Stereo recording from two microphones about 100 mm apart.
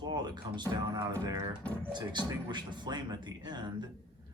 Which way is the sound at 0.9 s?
35° right (ahead or behind).